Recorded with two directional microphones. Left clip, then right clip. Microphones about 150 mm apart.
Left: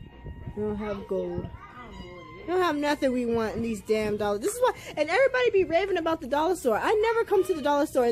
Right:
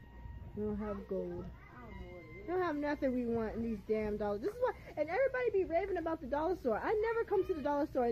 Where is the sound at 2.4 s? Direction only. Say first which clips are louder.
Left 10 dB; 20° left (ahead or behind).